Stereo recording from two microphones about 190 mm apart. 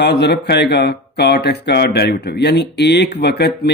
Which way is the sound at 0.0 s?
60° left (ahead or behind).